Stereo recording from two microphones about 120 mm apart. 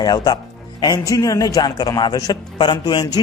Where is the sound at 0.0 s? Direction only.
35° left (ahead or behind).